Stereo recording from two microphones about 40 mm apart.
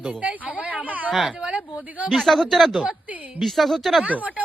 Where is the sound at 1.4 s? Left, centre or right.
Right.